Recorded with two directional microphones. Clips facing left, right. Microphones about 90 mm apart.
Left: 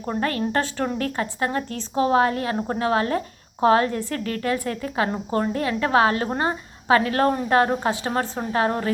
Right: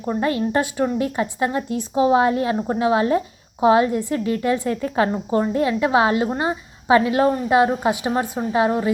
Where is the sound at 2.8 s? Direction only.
15° right (ahead or behind).